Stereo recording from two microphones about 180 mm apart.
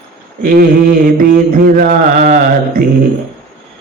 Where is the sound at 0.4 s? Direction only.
55° right (ahead or behind).